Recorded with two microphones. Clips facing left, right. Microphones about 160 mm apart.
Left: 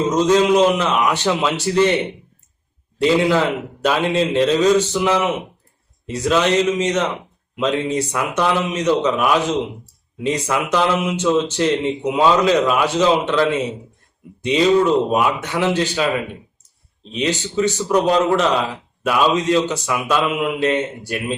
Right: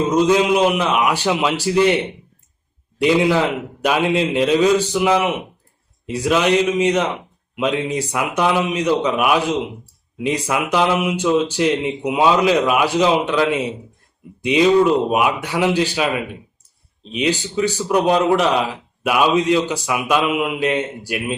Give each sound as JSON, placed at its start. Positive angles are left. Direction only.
{"t": 0.1, "sound": "a man's voice", "side_deg": -10}
{"t": 3.0, "sound": "a man's voice", "side_deg": -15}
{"t": 17.1, "sound": "a man's voice", "side_deg": -15}